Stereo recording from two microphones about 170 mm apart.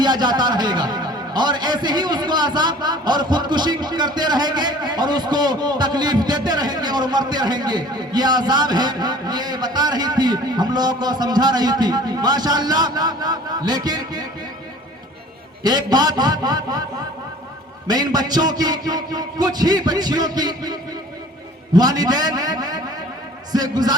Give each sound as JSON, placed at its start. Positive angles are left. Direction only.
{"t": 0.0, "sound": "a man's voice", "side_deg": -25}
{"t": 15.6, "sound": "a man's voice", "side_deg": -25}
{"t": 17.8, "sound": "a man's voice", "side_deg": -25}
{"t": 21.8, "sound": "a man's voice", "side_deg": -25}